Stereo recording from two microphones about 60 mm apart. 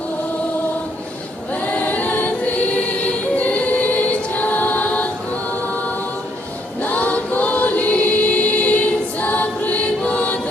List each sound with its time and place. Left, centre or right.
1.6 s choir: left
3.3 s choir: left
6.8 s choir: left